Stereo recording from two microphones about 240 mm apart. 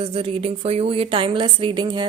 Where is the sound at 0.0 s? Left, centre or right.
Right.